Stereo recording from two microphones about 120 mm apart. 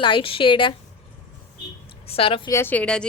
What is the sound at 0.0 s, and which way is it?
Speech, 45° left (ahead or behind).